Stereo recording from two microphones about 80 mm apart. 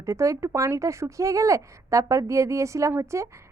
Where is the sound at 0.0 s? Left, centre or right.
Right.